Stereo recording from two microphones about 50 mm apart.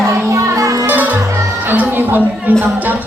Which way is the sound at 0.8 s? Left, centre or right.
Right.